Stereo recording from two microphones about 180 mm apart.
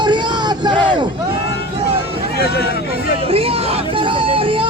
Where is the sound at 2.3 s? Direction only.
65° left (ahead or behind).